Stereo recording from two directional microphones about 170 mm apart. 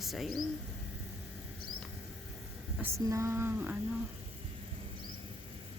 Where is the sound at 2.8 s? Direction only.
15° right (ahead or behind).